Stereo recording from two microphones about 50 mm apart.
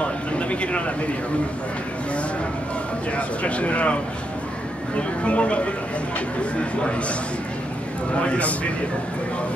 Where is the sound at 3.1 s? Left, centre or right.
Left.